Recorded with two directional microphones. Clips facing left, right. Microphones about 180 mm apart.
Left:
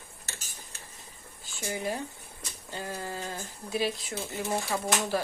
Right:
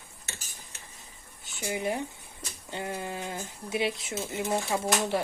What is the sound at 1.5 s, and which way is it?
Speech, 20° right (ahead or behind).